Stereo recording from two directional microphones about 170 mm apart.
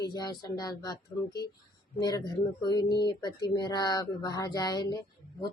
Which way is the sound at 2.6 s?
25° left (ahead or behind).